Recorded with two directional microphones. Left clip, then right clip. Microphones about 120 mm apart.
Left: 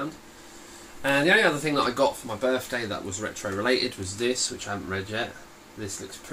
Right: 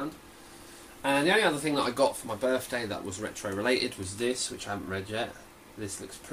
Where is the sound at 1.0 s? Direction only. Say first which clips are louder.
Left 4 dB; 10° left (ahead or behind).